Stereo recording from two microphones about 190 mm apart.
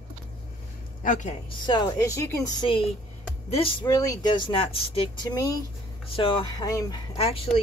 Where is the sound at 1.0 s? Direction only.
40° left (ahead or behind).